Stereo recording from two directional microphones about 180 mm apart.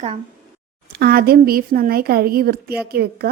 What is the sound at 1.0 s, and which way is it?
A woman's voice, 55° right (ahead or behind).